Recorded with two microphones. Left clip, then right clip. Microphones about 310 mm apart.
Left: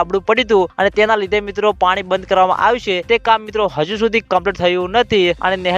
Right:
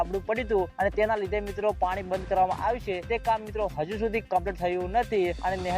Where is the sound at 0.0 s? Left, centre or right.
Left.